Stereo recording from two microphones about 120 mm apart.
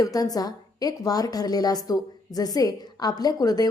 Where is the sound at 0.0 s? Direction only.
30° left (ahead or behind).